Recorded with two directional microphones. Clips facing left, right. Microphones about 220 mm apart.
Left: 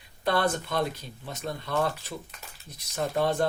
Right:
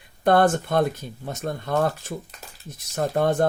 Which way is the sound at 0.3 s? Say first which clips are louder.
Right 8 dB; 50° right (ahead or behind).